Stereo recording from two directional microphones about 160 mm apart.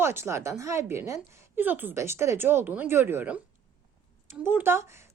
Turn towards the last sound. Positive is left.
turn(degrees=-15)  # may be behind; listen again after turning